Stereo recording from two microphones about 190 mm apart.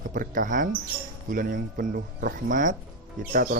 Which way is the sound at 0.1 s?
45° right (ahead or behind).